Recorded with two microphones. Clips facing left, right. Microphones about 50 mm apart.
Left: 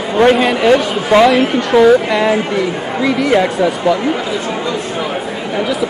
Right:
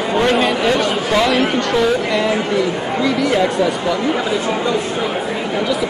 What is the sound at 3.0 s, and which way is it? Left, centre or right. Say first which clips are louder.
Speech: left 4 dB; centre.